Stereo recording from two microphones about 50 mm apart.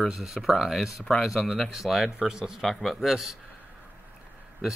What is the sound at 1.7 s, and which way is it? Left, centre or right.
Speech, centre.